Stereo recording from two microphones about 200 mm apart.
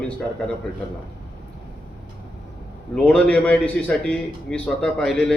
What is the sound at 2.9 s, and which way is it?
A man's voice, 5° left (ahead or behind).